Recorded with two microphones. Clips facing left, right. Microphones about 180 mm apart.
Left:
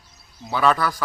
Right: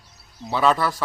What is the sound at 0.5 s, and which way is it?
Speech, centre (ahead or behind).